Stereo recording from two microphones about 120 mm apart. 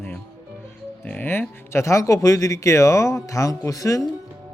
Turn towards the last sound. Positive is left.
turn(degrees=30)  # may be behind; listen again after turning